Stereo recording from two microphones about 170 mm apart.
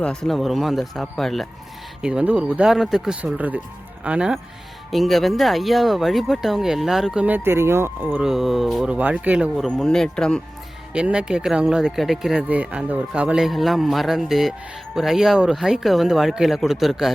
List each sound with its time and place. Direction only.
0.0 s speech: 5° left (ahead or behind)